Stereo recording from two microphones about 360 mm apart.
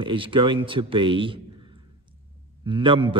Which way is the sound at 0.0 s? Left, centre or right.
Centre.